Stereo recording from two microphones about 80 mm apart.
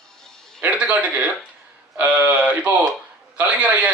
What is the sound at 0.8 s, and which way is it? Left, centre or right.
A man's voice, centre.